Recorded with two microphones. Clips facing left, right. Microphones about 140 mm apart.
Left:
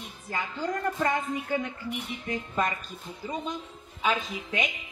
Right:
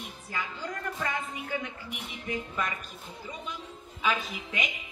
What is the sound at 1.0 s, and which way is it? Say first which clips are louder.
Speech: left 6 dB; 45° left (ahead or behind).